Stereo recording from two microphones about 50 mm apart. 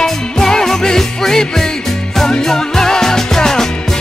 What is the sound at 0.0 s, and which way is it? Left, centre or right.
Music, centre.